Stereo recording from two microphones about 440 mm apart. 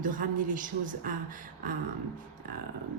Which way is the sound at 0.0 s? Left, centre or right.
Centre.